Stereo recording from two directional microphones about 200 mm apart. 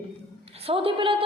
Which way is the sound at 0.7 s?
30° right (ahead or behind).